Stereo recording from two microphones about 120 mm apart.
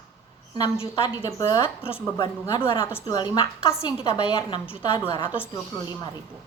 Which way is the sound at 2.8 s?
20° left (ahead or behind).